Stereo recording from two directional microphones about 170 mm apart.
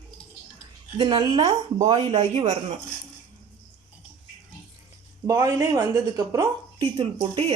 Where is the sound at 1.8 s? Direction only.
40° right (ahead or behind).